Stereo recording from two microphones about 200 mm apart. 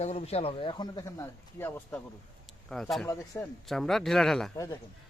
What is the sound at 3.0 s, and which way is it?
Speech, 10° left (ahead or behind).